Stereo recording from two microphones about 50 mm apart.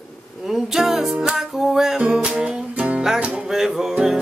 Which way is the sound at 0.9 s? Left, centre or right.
Centre.